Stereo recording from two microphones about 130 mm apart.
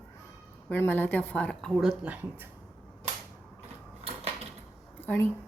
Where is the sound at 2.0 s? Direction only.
10° right (ahead or behind).